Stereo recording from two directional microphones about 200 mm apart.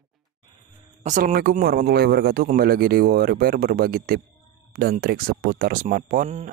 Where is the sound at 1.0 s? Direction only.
45° right (ahead or behind).